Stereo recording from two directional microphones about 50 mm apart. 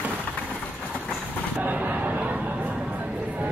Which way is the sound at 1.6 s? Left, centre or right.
Right.